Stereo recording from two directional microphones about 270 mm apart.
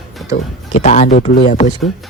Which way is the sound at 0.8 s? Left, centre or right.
Left.